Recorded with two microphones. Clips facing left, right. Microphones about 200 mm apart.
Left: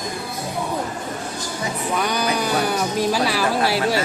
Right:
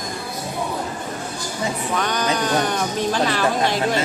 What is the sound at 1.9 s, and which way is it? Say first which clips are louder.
Speech: left 1 dB; 10° left (ahead or behind).